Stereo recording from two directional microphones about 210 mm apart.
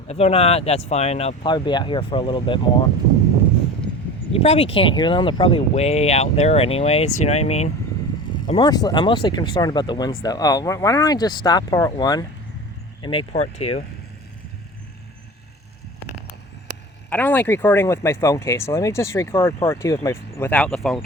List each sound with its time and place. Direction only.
0.1 s speech: 30° left (ahead or behind)
4.3 s speech: 30° left (ahead or behind)
17.1 s speech: 10° left (ahead or behind)